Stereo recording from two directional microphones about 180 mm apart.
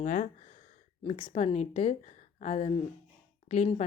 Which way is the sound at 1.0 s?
30° left (ahead or behind).